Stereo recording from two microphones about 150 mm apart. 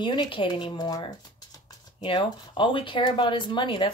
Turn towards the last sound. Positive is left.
turn(degrees=35)  # may be behind; listen again after turning